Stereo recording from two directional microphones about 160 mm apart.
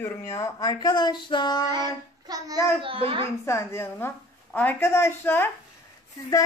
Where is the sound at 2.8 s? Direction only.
35° right (ahead or behind).